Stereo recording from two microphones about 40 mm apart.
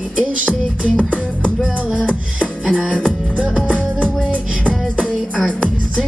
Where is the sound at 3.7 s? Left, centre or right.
Right.